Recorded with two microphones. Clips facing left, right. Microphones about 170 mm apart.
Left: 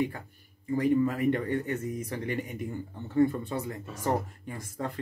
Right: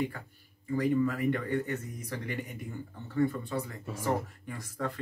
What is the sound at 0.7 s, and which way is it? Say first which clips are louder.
Speech: left 3 dB; 25° left (ahead or behind).